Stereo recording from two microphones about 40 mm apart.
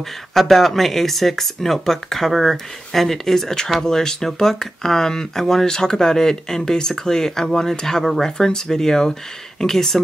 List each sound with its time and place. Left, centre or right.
0.3 s speech: centre